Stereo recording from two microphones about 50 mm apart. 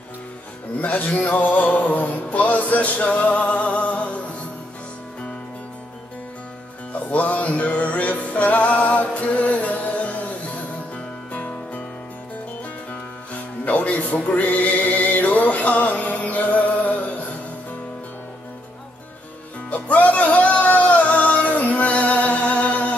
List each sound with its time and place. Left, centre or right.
0.7 s music: left
6.9 s music: left
11.3 s music: left
13.3 s music: left
19.7 s music: left